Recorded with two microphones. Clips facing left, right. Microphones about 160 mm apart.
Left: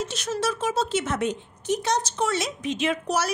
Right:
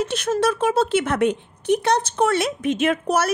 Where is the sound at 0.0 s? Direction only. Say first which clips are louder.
Right 7 dB; 55° right (ahead or behind).